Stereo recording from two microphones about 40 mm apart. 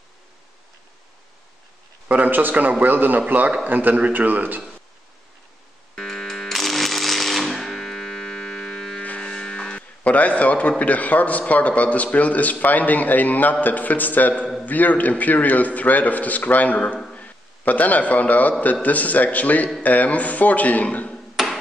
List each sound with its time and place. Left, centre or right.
2.0 s a man's voice: right
5.9 s music: centre
10.0 s a sound: left
10.8 s a man's voice: left
17.1 s a sound: left
18.6 s a man's voice: left
21.4 s hammer: centre